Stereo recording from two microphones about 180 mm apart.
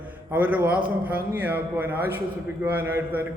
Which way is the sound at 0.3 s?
10° right (ahead or behind).